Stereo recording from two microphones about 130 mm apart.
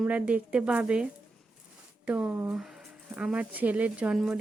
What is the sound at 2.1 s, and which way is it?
Speech, 10° right (ahead or behind).